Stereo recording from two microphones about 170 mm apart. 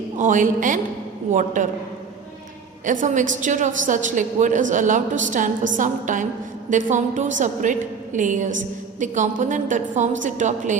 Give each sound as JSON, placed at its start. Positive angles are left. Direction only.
{"t": 0.2, "sound": "a woman's voice", "side_deg": -50}
{"t": 2.8, "sound": "a woman's voice", "side_deg": -50}